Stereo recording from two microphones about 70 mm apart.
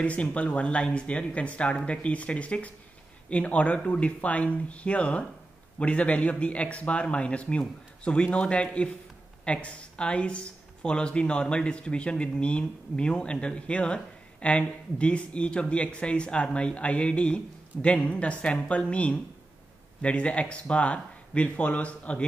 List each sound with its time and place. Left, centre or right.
0.0 s speech: centre